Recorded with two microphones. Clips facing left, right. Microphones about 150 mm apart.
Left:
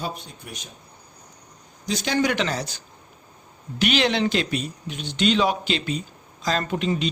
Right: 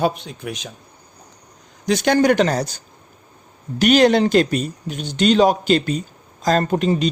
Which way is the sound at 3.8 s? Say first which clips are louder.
Right 8 dB; 45° right (ahead or behind).